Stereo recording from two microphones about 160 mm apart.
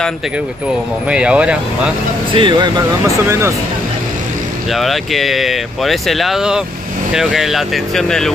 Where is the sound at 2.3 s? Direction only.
30° right (ahead or behind).